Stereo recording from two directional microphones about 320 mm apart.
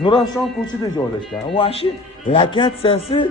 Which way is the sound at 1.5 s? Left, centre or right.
Centre.